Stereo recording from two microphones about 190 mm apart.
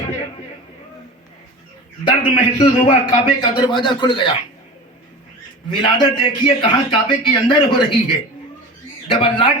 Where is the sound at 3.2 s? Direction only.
25° left (ahead or behind).